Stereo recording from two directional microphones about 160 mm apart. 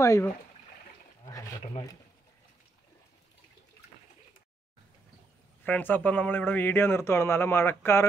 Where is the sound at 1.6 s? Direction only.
35° left (ahead or behind).